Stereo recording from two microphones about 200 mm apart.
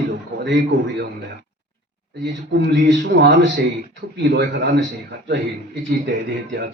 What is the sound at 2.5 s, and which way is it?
A man's voice, 60° right (ahead or behind).